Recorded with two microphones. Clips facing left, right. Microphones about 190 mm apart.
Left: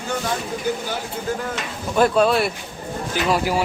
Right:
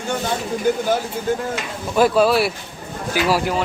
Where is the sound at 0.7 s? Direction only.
55° right (ahead or behind).